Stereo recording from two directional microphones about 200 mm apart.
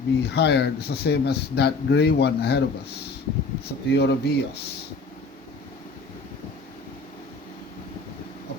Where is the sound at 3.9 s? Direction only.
55° left (ahead or behind).